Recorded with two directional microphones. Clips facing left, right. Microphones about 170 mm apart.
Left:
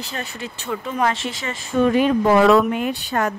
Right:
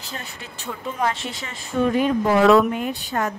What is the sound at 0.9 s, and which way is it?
Speech, 90° left.